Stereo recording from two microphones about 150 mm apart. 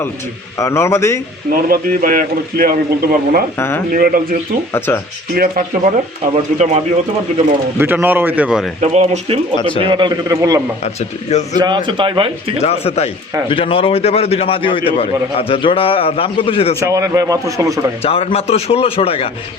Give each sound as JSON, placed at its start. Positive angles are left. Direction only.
{"t": 0.6, "sound": "a man's voice", "side_deg": 15}
{"t": 1.6, "sound": "a man's voice", "side_deg": -70}
{"t": 4.9, "sound": "a man's voice", "side_deg": 15}
{"t": 5.3, "sound": "a man's voice", "side_deg": -75}
{"t": 6.3, "sound": "speech", "side_deg": -45}
{"t": 7.8, "sound": "a man's voice", "side_deg": -10}
{"t": 8.8, "sound": "speech", "side_deg": -45}
{"t": 9.6, "sound": "a man's voice", "side_deg": 35}
{"t": 9.9, "sound": "speech", "side_deg": -25}
{"t": 10.8, "sound": "speech", "side_deg": 50}
{"t": 11.5, "sound": "speech", "side_deg": -30}
{"t": 12.5, "sound": "a man's voice", "side_deg": 45}
{"t": 16.8, "sound": "speech", "side_deg": -20}
{"t": 18.0, "sound": "a man's voice", "side_deg": 40}